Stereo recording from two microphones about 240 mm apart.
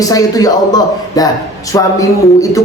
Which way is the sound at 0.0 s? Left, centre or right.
Centre.